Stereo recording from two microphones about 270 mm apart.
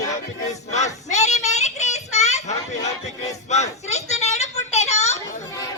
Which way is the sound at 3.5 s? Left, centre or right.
Left.